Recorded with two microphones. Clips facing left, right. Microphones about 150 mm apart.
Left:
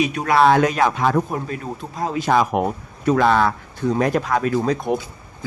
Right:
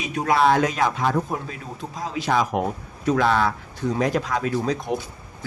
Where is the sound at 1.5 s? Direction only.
55° left (ahead or behind).